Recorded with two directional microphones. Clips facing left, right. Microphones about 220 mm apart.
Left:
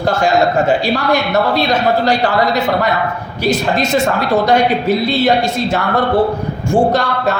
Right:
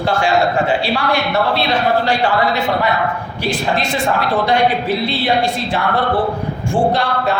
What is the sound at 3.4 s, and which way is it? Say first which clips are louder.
A man's voice: left 4 dB; 40° left (ahead or behind).